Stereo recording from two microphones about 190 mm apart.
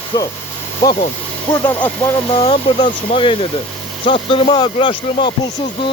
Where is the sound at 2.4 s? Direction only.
30° left (ahead or behind).